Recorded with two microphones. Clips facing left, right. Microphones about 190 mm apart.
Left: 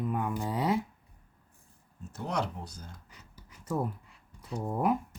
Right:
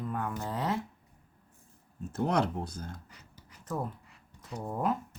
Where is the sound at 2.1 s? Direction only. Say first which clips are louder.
Right 5 dB; 55° right (ahead or behind).